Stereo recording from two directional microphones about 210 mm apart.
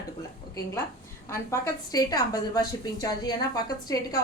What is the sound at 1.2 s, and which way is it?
A woman's voice, 15° left (ahead or behind).